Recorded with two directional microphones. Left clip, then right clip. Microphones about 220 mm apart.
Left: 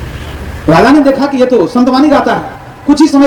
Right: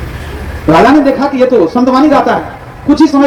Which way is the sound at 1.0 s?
55° left (ahead or behind).